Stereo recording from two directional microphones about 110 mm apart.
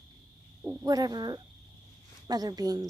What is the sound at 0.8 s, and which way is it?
Speech, 40° right (ahead or behind).